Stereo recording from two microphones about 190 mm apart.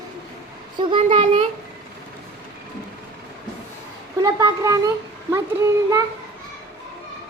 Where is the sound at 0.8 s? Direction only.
25° right (ahead or behind).